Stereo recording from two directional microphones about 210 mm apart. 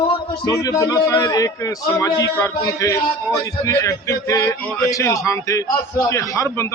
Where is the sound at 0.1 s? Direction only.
15° left (ahead or behind).